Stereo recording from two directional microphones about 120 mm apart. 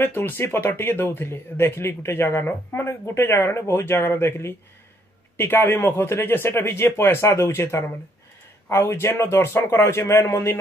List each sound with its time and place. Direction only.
0.0 s speech: 20° left (ahead or behind)